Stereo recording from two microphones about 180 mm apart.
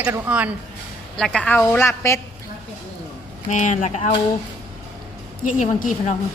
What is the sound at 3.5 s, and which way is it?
Speech, 45° left (ahead or behind).